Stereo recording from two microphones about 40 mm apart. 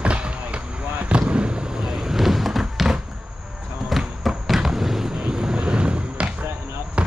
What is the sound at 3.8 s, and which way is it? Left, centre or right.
Vehicle, centre.